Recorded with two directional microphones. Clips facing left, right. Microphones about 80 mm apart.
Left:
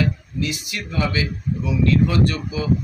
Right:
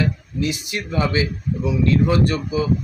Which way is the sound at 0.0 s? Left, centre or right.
Right.